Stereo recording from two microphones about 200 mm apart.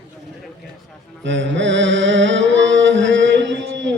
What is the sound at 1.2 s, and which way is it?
Mantra, 65° right (ahead or behind).